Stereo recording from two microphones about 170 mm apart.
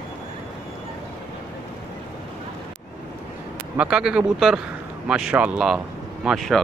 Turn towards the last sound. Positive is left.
turn(degrees=0)  # may be behind; listen again after turning